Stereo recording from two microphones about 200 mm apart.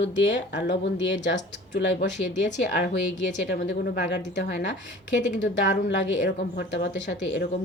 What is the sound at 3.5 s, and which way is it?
Speech, 50° left (ahead or behind).